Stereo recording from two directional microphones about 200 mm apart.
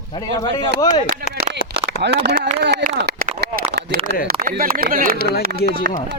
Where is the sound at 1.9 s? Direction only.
55° right (ahead or behind).